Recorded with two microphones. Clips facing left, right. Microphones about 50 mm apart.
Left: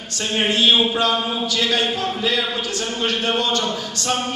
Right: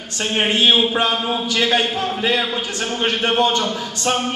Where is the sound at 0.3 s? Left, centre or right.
Right.